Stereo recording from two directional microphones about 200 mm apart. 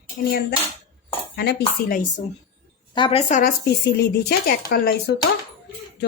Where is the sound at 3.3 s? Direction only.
45° left (ahead or behind).